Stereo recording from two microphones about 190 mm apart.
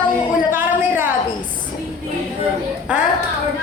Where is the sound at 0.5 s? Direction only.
10° right (ahead or behind).